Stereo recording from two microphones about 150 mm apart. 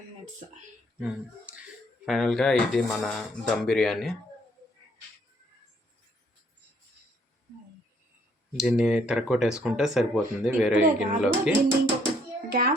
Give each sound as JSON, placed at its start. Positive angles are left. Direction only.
{"t": 0.9, "sound": "speech", "side_deg": -10}
{"t": 8.5, "sound": "speech", "side_deg": -5}
{"t": 12.5, "sound": "a child's voice", "side_deg": -90}